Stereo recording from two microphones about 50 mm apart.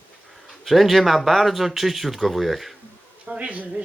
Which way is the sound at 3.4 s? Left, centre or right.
Right.